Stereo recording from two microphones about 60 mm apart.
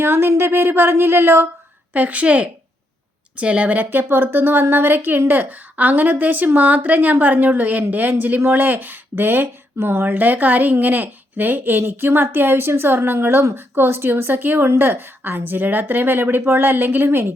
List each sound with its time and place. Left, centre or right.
0.0 s a woman's voice: right
1.9 s a woman's voice: right